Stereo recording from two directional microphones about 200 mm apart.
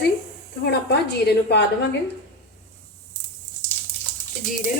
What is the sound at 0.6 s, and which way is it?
Speech, 55° left (ahead or behind).